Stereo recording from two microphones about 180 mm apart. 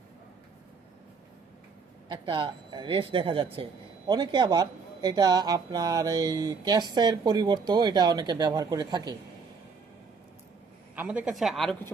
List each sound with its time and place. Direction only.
2.0 s speech: 25° right (ahead or behind)
10.9 s speech: 10° right (ahead or behind)